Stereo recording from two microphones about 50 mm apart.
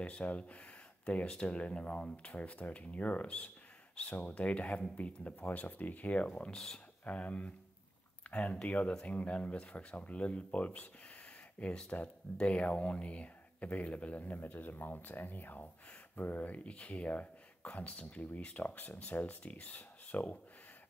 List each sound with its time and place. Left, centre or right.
0.0 s speech: left
6.5 s speech: centre
7.1 s speech: left